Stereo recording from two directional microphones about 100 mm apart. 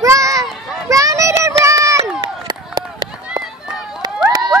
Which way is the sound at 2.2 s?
45° right (ahead or behind).